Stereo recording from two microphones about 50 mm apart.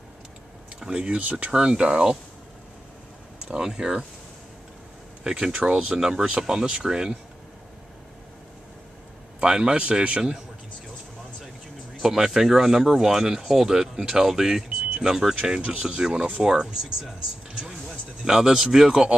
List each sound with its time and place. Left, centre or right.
0.7 s a man's voice: centre
3.4 s speech: centre
5.2 s speech: centre
9.4 s a man's voice: centre
12.0 s speech: centre
15.5 s a man's voice: right